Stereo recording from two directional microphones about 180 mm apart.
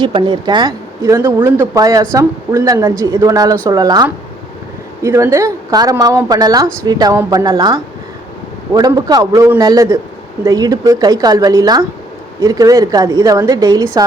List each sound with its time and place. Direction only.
0.0 s a woman's voice: 25° right (ahead or behind)